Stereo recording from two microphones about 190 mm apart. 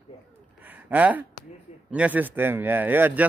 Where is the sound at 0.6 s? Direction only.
10° right (ahead or behind).